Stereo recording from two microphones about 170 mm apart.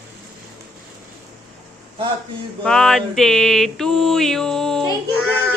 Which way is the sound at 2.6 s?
5° left (ahead or behind).